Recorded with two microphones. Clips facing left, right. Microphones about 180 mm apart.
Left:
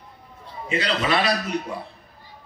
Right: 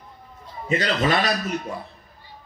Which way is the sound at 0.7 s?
40° right (ahead or behind).